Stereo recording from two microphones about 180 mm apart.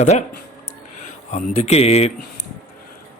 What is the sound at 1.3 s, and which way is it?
Speech, 35° left (ahead or behind).